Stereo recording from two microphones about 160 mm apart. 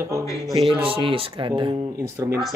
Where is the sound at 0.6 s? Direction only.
35° right (ahead or behind).